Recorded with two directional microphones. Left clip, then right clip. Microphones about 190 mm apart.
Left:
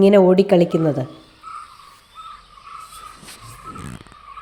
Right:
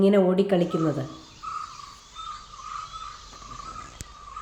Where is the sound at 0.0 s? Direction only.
45° left (ahead or behind).